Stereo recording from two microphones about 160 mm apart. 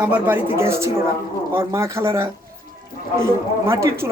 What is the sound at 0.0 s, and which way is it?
Speech, 10° right (ahead or behind).